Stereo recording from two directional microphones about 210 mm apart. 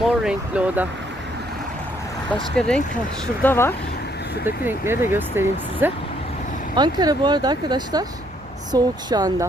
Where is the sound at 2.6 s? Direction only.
5° left (ahead or behind).